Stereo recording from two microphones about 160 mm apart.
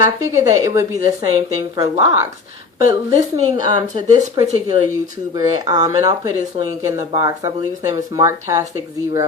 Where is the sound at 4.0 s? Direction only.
25° right (ahead or behind).